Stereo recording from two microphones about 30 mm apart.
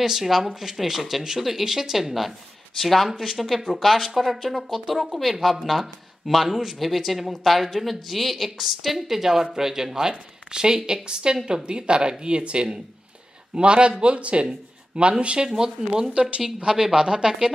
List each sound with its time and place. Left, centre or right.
0.0 s speech: centre
2.8 s a woman's voice: centre; by 15.4 s right
15.4 s a woman's voice: right
16.1 s speech: right
16.4 s a woman's voice: centre